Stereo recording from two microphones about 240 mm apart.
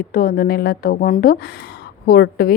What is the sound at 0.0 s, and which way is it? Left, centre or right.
A woman's voice, left.